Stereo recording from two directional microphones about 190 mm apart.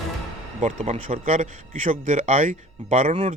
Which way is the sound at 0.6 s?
35° right (ahead or behind).